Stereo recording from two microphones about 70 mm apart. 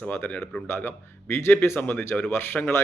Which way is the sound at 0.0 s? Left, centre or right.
Left.